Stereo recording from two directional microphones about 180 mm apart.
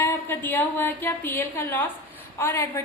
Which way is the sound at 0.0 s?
15° left (ahead or behind).